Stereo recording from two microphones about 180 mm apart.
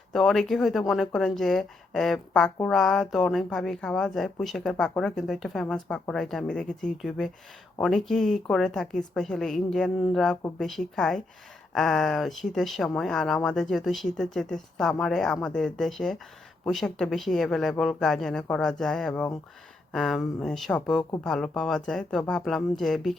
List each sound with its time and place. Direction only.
0.1 s speech: centre (ahead or behind)